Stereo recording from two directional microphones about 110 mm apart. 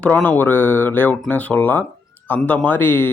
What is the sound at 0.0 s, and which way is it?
Speech, 15° left (ahead or behind).